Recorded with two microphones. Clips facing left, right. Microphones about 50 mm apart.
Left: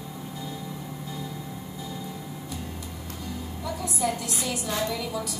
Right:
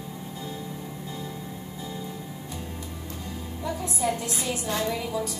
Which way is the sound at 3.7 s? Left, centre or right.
Right.